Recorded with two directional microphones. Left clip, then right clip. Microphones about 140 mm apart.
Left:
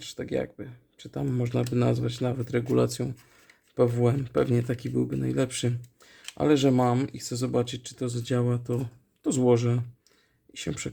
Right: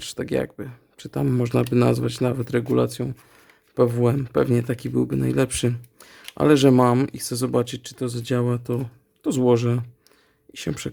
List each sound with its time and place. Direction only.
0.0 s speech: 40° right (ahead or behind)
2.7 s speech: 15° right (ahead or behind)